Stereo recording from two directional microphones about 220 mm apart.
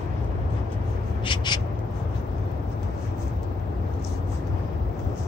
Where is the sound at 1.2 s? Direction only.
20° left (ahead or behind).